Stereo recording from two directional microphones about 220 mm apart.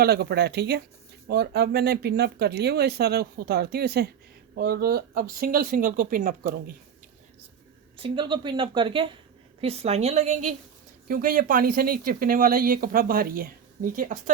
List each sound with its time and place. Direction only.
0.0 s speech: 45° right (ahead or behind)
7.9 s a woman's voice: 20° right (ahead or behind)